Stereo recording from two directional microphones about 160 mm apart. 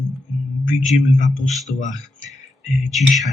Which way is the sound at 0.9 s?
50° left (ahead or behind).